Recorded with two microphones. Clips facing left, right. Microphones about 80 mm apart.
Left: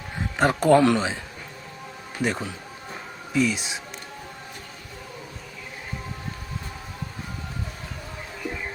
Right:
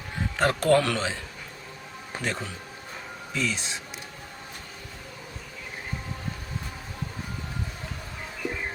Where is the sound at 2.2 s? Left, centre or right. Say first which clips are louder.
Left 6 dB; centre.